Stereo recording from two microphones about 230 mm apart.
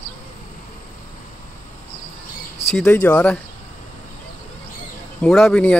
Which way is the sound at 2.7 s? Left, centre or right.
Centre.